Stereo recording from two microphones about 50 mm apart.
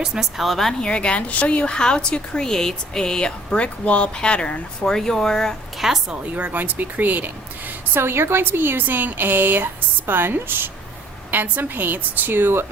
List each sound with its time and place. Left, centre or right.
0.0 s a woman's voice: centre
0.4 s a woman's voice: centre
0.8 s a woman's voice: left
4.9 s speech: centre
5.7 s a woman's voice: centre
6.1 s a woman's voice: right